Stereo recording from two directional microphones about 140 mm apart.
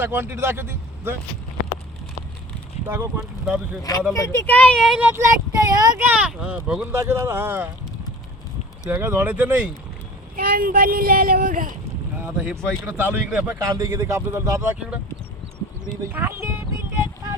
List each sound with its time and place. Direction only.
0.0 s speech: 15° right (ahead or behind)
2.8 s speech: 15° right (ahead or behind)
4.1 s speech: 20° left (ahead or behind)
4.9 s speech: 10° right (ahead or behind); by 6.0 s 25° right (ahead or behind)
6.0 s speech: 10° right (ahead or behind)
8.9 s speech: 15° right (ahead or behind)
10.3 s a child's voice: 90° right
12.1 s speech: 10° right (ahead or behind)
13.6 s speech: 25° right (ahead or behind)